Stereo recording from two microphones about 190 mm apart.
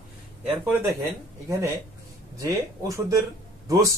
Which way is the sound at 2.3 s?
20° right (ahead or behind).